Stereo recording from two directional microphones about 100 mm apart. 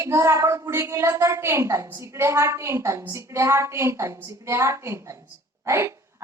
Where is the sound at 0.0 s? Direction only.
30° right (ahead or behind).